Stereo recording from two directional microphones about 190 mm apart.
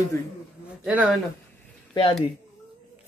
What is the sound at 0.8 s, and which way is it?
Speech, 5° right (ahead or behind).